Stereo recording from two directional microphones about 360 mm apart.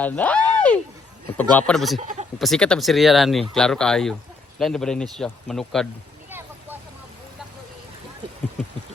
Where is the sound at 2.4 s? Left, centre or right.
Centre.